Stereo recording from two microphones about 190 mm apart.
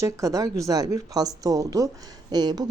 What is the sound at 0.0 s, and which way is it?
A woman's voice, 15° right (ahead or behind).